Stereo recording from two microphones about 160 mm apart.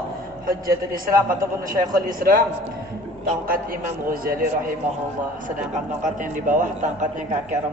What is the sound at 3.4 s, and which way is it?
A man's voice, 65° right (ahead or behind).